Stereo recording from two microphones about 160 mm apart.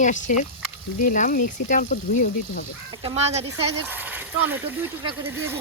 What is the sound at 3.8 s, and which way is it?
Speech, 10° right (ahead or behind).